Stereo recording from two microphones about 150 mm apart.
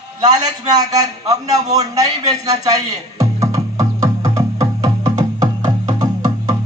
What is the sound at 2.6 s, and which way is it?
Music, 25° right (ahead or behind).